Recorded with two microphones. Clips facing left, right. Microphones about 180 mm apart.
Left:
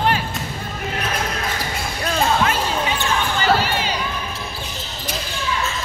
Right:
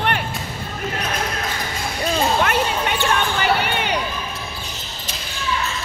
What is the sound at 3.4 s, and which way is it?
Crowd, 65° right (ahead or behind).